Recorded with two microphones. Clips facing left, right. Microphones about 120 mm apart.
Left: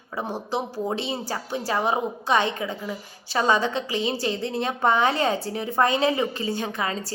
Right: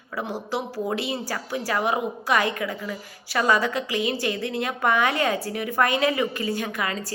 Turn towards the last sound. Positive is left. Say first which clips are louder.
# even
turn(degrees=30)  # may be behind; listen again after turning